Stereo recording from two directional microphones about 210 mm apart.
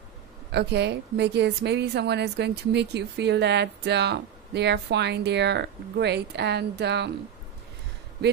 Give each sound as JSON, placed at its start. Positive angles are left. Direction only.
{"t": 0.5, "sound": "speech", "side_deg": -55}